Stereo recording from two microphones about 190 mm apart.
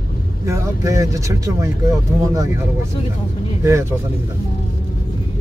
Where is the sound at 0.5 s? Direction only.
15° right (ahead or behind).